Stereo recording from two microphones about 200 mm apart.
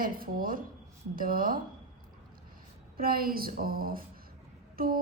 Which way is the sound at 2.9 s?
45° right (ahead or behind).